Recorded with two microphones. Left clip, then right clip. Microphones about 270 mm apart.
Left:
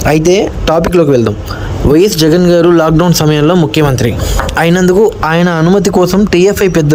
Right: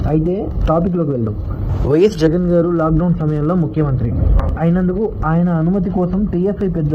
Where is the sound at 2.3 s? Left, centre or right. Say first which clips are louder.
Left 9 dB; left.